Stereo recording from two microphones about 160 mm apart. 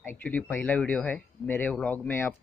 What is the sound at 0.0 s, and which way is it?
A man's voice, 15° left (ahead or behind).